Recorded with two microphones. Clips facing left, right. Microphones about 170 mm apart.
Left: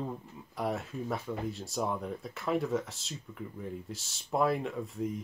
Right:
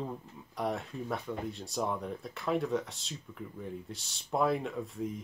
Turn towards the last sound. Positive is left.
turn(degrees=0)  # may be behind; listen again after turning